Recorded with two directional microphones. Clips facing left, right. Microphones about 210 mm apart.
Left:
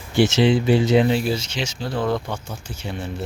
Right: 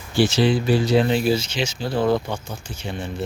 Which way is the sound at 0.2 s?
20° left (ahead or behind).